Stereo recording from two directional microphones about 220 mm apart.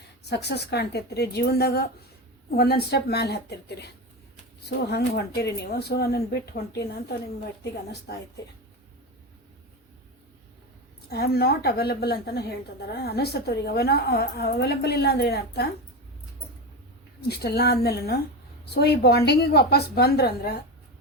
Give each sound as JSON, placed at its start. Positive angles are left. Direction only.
{"t": 0.3, "sound": "a woman's voice", "side_deg": 50}
{"t": 11.1, "sound": "a woman's voice", "side_deg": 45}
{"t": 17.2, "sound": "a woman's voice", "side_deg": 45}